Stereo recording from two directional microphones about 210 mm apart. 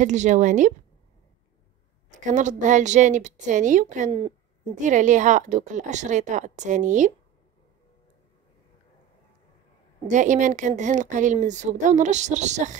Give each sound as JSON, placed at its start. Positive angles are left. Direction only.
{"t": 0.0, "sound": "a woman's voice", "side_deg": -35}
{"t": 2.0, "sound": "a woman's voice", "side_deg": -35}
{"t": 10.0, "sound": "a woman's voice", "side_deg": -35}